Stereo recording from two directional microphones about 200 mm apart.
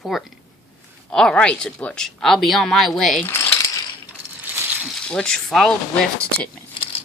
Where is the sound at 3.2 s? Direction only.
15° left (ahead or behind).